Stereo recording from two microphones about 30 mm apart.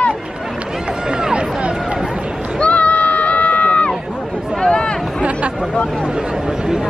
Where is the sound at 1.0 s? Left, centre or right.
Right.